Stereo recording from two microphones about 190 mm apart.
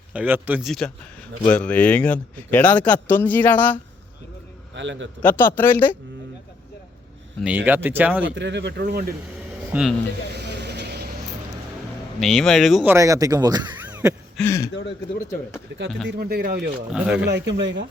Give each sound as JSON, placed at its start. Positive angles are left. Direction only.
{"t": 0.1, "sound": "a man's voice", "side_deg": -10}
{"t": 4.7, "sound": "a man's voice", "side_deg": -70}
{"t": 5.4, "sound": "a man's voice", "side_deg": 10}
{"t": 7.4, "sound": "speech", "side_deg": -10}
{"t": 8.4, "sound": "speech", "side_deg": -65}
{"t": 9.7, "sound": "speech", "side_deg": -10}
{"t": 10.3, "sound": "vehicle", "side_deg": -60}
{"t": 12.2, "sound": "speech", "side_deg": 0}
{"t": 12.9, "sound": "speech", "side_deg": -15}
{"t": 13.9, "sound": "a sound", "side_deg": -10}
{"t": 14.3, "sound": "a man's voice", "side_deg": 15}
{"t": 15.7, "sound": "speech", "side_deg": -65}
{"t": 16.9, "sound": "speech", "side_deg": -5}
{"t": 17.2, "sound": "speech", "side_deg": -65}